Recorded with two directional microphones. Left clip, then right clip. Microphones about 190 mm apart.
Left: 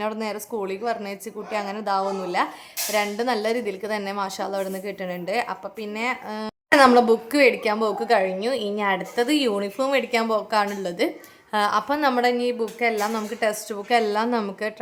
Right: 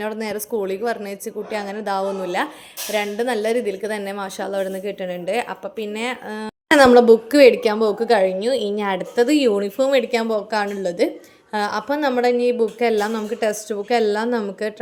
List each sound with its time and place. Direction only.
0.0 s a woman's voice: 5° right (ahead or behind)